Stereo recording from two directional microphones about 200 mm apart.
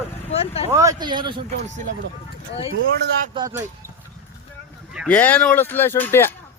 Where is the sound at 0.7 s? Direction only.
20° right (ahead or behind).